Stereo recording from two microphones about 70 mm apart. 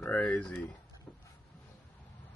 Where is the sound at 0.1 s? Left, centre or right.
Centre.